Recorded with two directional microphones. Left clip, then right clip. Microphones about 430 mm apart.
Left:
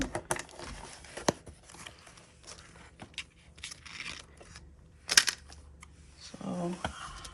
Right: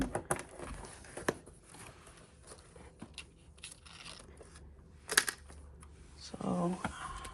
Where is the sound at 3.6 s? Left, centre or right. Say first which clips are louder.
Left 9 dB; left.